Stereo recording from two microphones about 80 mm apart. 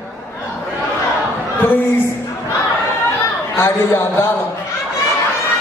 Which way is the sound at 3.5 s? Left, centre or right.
Left.